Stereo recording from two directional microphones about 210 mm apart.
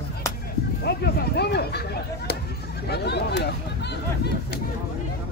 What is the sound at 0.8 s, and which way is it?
Speech, 50° left (ahead or behind).